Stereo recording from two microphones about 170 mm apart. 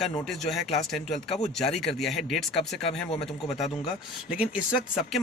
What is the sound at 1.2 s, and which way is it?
Speech, 40° left (ahead or behind).